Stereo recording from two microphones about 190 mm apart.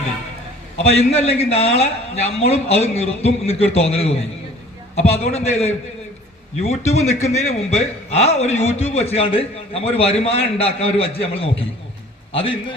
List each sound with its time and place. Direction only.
0.8 s a man's voice: 35° left (ahead or behind)